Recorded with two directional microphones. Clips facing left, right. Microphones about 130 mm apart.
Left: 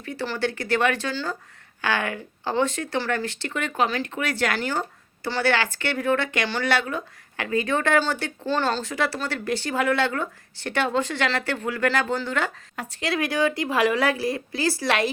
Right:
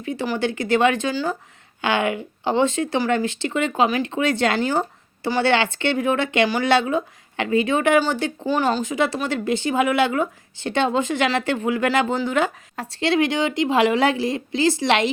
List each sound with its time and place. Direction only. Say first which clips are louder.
0.0 s speech: right 4 dB; 20° right (ahead or behind)
12.7 s speech: right 8 dB; 30° right (ahead or behind)